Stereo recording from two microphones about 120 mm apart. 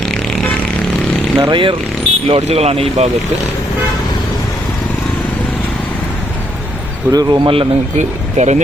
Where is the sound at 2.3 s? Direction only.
55° right (ahead or behind).